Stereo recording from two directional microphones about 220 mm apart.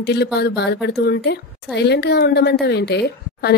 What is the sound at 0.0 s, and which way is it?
Speech, 50° left (ahead or behind).